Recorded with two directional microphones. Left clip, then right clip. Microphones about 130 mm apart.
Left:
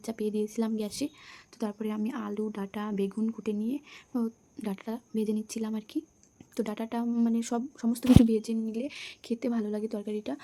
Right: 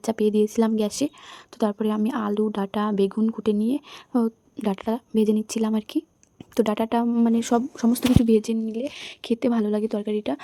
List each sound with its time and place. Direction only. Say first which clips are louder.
0.0 s speech: right 11 dB; 45° right (ahead or behind)
3.2 s speech: right 8 dB; 30° right (ahead or behind)
3.4 s speech: right 9 dB; 50° right (ahead or behind)
8.0 s speech: left 1 dB; centre (ahead or behind)
8.3 s speech: right 9 dB; 45° right (ahead or behind)
8.6 s speech: right 6 dB; 25° right (ahead or behind)
9.2 s a woman's voice: right 9 dB; 45° right (ahead or behind)